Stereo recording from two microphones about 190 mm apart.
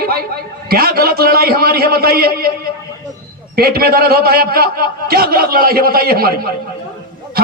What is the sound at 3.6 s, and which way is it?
A man's voice, 55° right (ahead or behind).